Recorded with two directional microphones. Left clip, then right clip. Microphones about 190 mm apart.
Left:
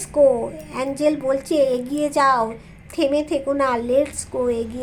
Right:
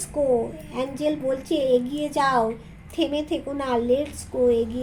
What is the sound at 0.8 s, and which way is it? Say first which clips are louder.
A woman's voice: left 5 dB; 10° left (ahead or behind).